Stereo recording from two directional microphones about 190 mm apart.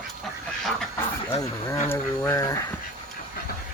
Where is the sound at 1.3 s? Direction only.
15° left (ahead or behind).